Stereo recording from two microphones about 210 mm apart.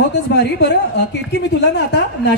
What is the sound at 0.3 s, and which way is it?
A man's voice, 55° left (ahead or behind).